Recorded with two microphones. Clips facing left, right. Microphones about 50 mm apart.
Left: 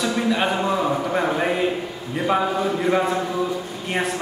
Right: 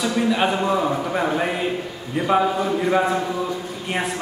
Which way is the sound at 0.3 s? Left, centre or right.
Centre.